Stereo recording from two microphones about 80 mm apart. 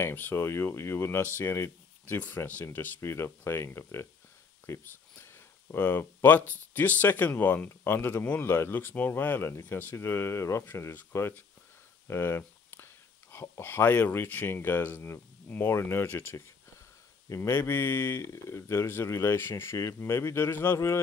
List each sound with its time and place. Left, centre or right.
0.0 s speech: left
2.1 s speech: left